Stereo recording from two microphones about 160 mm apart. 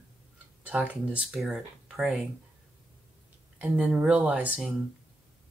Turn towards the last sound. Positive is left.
turn(degrees=-5)  # may be behind; listen again after turning